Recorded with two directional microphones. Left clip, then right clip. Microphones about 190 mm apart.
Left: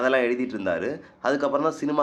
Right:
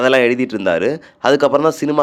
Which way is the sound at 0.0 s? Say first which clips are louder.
Right 9 dB; 50° right (ahead or behind).